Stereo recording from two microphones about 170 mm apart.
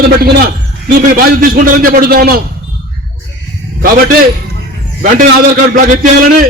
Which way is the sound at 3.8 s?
60° right (ahead or behind).